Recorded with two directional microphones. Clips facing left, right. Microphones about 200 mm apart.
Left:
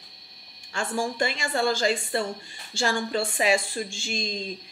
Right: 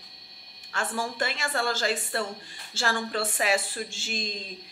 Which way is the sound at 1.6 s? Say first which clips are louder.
Left 6 dB; 5° right (ahead or behind).